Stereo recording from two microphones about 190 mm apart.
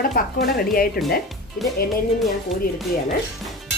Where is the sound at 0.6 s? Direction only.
50° left (ahead or behind).